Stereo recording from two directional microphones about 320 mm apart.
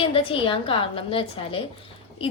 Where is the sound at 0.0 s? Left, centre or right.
Centre.